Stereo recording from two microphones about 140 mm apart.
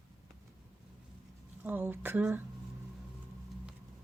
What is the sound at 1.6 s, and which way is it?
Speech, 15° right (ahead or behind).